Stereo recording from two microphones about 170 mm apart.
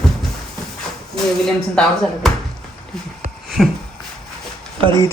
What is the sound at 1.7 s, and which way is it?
Speech, 5° left (ahead or behind).